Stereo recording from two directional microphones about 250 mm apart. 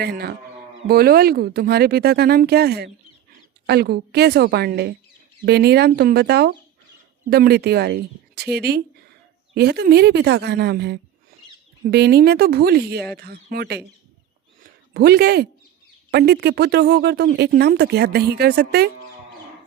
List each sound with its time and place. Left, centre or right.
0.0 s speech: right
14.6 s a sound: right
16.1 s speech: right